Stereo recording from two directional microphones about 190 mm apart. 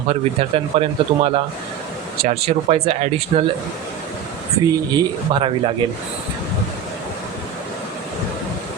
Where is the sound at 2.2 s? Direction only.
35° right (ahead or behind).